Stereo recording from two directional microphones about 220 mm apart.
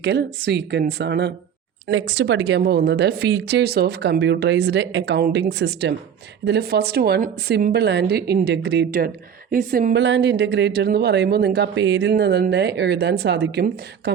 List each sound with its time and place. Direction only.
0.0 s speech: 50° right (ahead or behind)
10.0 s speech: 55° right (ahead or behind)